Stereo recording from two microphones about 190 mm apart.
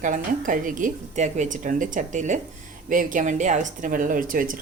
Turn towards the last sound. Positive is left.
turn(degrees=-45)  # may be behind; listen again after turning